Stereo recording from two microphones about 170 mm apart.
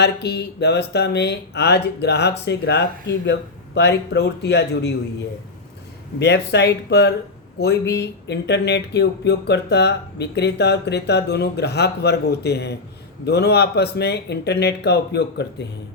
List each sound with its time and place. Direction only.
0.0 s speech: 75° left (ahead or behind)
3.8 s speech: 85° left
6.1 s speech: 90° left